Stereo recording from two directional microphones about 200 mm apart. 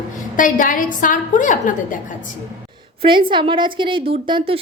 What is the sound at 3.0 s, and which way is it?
A woman's voice, 25° right (ahead or behind).